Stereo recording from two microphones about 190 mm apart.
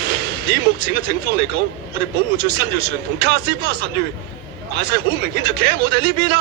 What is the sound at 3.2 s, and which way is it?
Speech, 60° right (ahead or behind).